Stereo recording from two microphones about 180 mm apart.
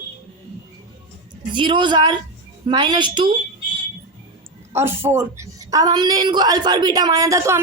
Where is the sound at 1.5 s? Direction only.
25° right (ahead or behind).